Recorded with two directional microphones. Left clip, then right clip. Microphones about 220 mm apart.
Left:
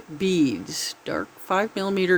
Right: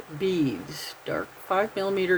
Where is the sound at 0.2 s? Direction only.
50° left (ahead or behind).